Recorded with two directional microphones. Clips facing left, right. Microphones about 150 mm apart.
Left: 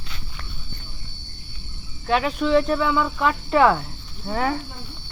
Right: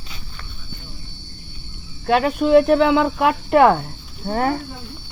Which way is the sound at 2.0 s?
50° right (ahead or behind).